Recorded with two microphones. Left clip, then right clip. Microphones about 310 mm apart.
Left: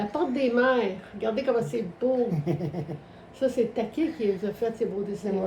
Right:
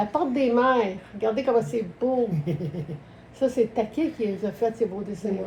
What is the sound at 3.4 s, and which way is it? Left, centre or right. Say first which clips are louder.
A woman's voice: right 2 dB; centre.